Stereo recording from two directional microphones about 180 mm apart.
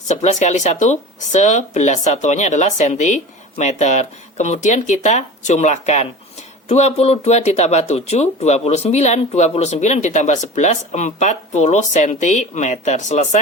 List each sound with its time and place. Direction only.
0.1 s speech: 40° left (ahead or behind)